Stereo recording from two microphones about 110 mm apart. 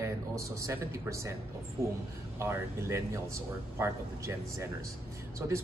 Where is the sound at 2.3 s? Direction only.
25° right (ahead or behind).